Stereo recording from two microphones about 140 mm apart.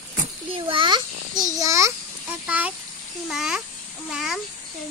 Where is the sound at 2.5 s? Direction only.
10° right (ahead or behind).